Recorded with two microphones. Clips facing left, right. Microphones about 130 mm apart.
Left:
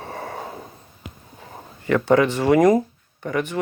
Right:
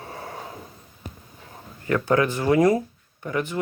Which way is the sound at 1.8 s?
80° left.